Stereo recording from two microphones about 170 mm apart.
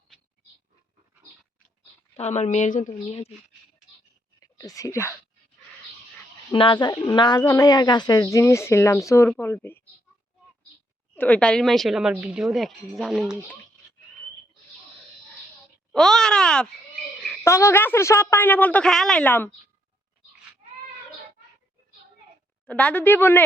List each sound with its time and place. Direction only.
2.1 s speech: 40° left (ahead or behind)
4.7 s a woman's voice: 20° left (ahead or behind)
6.5 s a woman's voice: 30° left (ahead or behind); by 9.8 s 15° left (ahead or behind)
11.1 s speech: 10° left (ahead or behind)
15.9 s speech: centre (ahead or behind)
17.4 s a woman's voice: 15° left (ahead or behind)
22.6 s a woman's voice: 10° left (ahead or behind)